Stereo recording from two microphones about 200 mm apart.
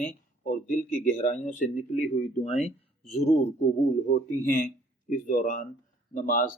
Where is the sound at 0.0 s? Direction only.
45° left (ahead or behind).